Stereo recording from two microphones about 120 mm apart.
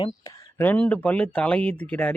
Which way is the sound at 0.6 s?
15° left (ahead or behind).